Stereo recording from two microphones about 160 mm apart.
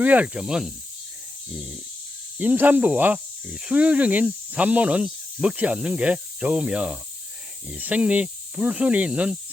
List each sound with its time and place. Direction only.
0.0 s snake: 10° right (ahead or behind)
2.4 s speech: 10° right (ahead or behind)